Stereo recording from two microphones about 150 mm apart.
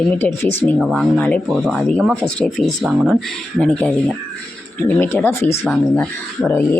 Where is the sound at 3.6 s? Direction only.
5° left (ahead or behind).